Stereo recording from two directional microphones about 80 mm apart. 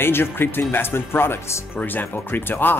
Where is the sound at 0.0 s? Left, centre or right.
Left.